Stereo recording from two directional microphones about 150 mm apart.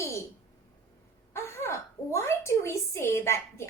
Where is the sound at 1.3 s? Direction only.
20° left (ahead or behind).